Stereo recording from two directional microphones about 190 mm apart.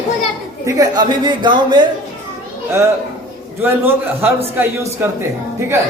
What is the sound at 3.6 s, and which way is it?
Speech, 10° right (ahead or behind).